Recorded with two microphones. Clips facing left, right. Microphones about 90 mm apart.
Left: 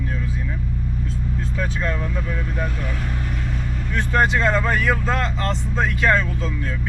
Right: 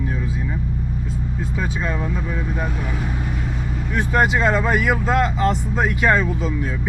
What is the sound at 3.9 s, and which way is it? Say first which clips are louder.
Speech: right 1 dB; 10° right (ahead or behind).